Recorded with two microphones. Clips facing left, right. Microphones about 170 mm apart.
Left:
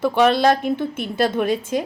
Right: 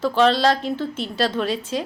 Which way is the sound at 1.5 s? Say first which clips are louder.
Left 4 dB; 50° left (ahead or behind).